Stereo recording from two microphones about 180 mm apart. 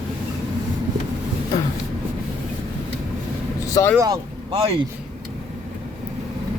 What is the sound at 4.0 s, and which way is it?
Speech, 25° right (ahead or behind).